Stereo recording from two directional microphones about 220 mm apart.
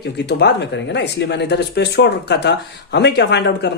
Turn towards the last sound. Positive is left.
turn(degrees=50)  # may be behind; listen again after turning